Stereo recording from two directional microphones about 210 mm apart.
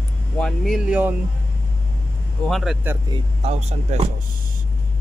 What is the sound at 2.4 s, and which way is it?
Speech, centre (ahead or behind).